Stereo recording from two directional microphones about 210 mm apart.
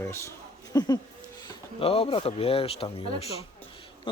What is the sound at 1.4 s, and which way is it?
Speech, 25° left (ahead or behind).